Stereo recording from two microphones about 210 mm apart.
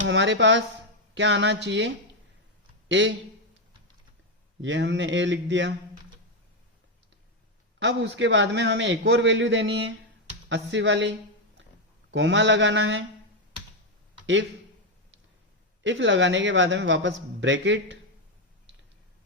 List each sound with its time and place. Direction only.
0.0 s a man's voice: 60° right (ahead or behind)
2.9 s a man's voice: 60° right (ahead or behind)
4.6 s a man's voice: 60° right (ahead or behind)
7.8 s a man's voice: 60° right (ahead or behind)
12.1 s a man's voice: 60° right (ahead or behind)
15.8 s a man's voice: 60° right (ahead or behind)